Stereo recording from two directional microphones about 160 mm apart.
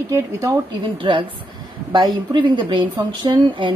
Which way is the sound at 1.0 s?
35° right (ahead or behind).